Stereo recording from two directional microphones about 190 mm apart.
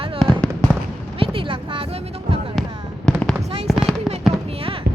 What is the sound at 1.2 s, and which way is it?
Speech, 25° right (ahead or behind).